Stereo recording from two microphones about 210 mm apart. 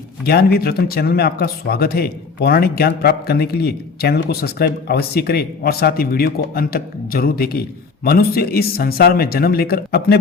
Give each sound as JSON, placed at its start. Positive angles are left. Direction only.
{"t": 0.3, "sound": "speech", "side_deg": 50}